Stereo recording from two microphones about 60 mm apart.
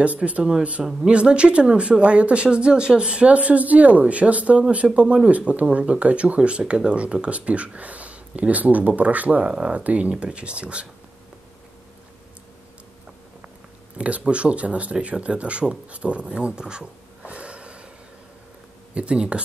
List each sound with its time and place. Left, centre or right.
0.0 s speech: right
13.9 s speech: centre
18.9 s speech: centre